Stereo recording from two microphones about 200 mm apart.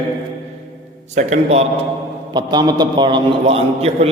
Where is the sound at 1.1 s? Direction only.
35° right (ahead or behind).